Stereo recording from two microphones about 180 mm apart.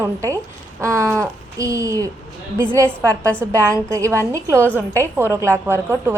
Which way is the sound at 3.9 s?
15° right (ahead or behind).